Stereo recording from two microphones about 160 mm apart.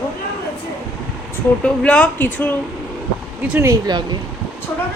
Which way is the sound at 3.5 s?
20° right (ahead or behind).